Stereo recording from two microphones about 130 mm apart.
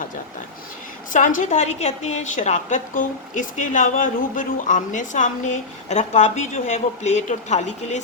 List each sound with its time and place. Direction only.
1.1 s a woman's voice: 80° left; by 8.0 s 60° left (ahead or behind)